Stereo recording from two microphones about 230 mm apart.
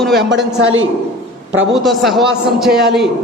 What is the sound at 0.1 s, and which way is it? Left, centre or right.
Speech, right.